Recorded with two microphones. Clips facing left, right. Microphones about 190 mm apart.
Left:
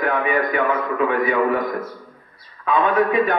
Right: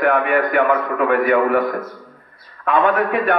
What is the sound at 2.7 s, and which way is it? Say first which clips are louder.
Speech: right 1 dB; 70° right (ahead or behind).